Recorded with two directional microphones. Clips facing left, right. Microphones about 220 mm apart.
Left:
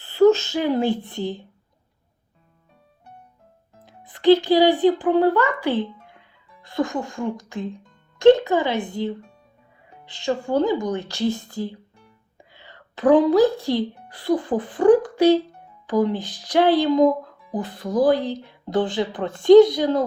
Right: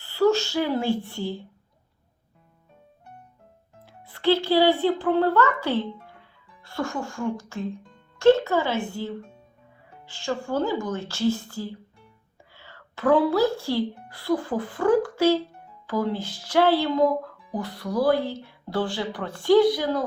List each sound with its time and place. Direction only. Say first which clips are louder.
0.0 s a woman's voice: left 5 dB; 20° left (ahead or behind)
3.8 s speech: left 7 dB; 15° left (ahead or behind)